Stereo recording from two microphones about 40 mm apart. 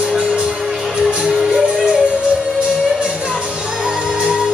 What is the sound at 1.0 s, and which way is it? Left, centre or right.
Music, centre.